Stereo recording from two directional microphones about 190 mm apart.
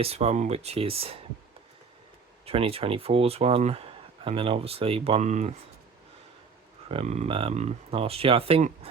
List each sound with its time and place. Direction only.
0.0 s speech: 35° right (ahead or behind)
2.5 s speech: 30° right (ahead or behind)
6.8 s speech: 35° right (ahead or behind)